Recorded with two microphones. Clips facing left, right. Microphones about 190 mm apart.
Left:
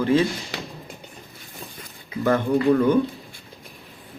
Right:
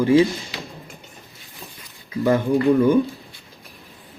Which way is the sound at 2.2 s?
10° right (ahead or behind).